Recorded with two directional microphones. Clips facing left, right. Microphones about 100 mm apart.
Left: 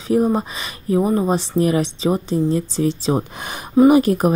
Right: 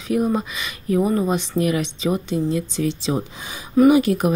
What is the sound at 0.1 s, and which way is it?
Speech, 30° left (ahead or behind).